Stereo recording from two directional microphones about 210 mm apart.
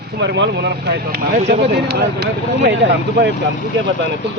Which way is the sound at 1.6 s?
50° right (ahead or behind).